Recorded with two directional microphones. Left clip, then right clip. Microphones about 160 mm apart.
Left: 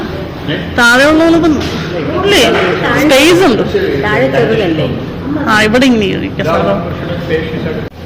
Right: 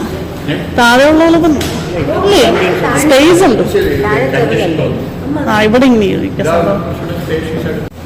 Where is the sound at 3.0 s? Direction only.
15° right (ahead or behind).